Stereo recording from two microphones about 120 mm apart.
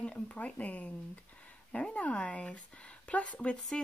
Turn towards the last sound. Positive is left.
turn(degrees=5)  # may be behind; listen again after turning